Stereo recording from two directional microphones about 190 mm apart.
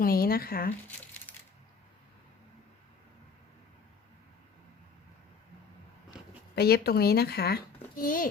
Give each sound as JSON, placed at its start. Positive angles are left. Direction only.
{"t": 0.0, "sound": "speech", "side_deg": 50}
{"t": 6.6, "sound": "speech", "side_deg": 55}